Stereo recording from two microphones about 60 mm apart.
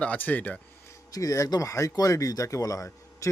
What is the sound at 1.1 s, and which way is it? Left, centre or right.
Speech, left.